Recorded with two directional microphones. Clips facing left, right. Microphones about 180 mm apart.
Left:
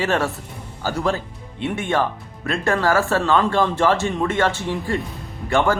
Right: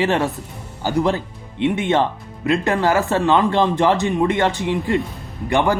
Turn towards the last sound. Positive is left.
turn(degrees=-15)  # may be behind; listen again after turning